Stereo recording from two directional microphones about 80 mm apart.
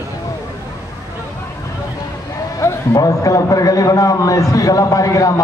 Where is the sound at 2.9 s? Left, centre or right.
Left.